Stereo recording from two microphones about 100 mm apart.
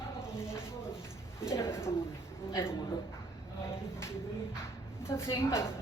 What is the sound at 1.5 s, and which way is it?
Bird, 25° left (ahead or behind).